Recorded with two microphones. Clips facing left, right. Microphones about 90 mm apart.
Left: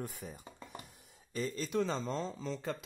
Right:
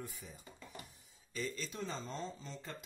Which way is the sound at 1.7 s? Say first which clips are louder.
Left 9 dB; 90° left.